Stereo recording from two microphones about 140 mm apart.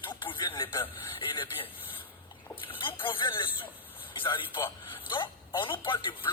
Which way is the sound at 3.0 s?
35° left (ahead or behind).